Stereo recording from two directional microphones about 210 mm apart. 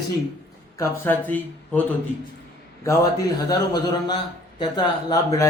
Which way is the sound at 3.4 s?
20° left (ahead or behind).